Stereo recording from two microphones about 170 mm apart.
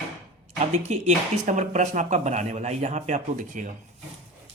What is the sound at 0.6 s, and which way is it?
Speech, 40° right (ahead or behind).